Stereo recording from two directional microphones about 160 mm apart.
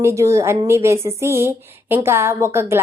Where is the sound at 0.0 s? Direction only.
20° right (ahead or behind).